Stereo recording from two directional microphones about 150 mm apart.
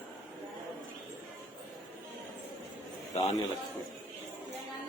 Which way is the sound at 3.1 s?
45° left (ahead or behind).